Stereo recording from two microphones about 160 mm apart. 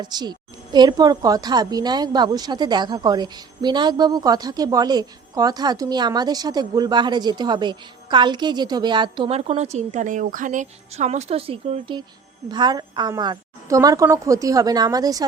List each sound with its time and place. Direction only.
0.0 s a woman's voice: 25° right (ahead or behind)
9.4 s a woman's voice: 45° right (ahead or behind); by 15.2 s 25° right (ahead or behind)